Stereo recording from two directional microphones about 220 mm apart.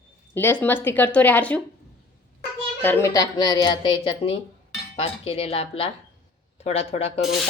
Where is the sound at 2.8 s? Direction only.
10° left (ahead or behind); by 7.2 s 25° left (ahead or behind).